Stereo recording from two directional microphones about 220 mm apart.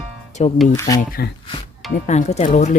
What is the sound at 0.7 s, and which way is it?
Speech, 15° left (ahead or behind).